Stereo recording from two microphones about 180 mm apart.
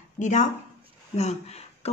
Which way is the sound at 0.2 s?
45° left (ahead or behind).